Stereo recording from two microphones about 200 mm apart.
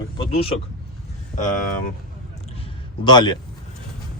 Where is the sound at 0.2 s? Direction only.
30° left (ahead or behind).